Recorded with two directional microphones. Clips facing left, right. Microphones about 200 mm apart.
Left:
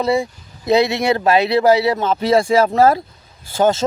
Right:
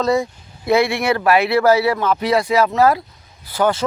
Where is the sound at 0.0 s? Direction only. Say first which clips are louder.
Even; 15° left (ahead or behind).